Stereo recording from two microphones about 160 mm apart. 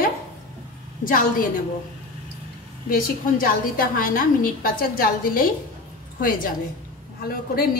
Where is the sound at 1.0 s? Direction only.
60° left (ahead or behind).